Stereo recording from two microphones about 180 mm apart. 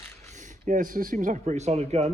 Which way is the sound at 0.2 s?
40° right (ahead or behind).